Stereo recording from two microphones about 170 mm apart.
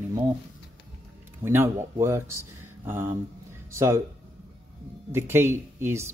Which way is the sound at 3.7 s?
15° right (ahead or behind).